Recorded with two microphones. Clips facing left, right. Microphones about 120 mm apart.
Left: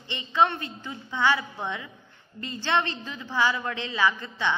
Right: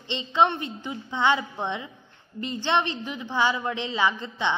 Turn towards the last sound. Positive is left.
turn(degrees=-20)  # may be behind; listen again after turning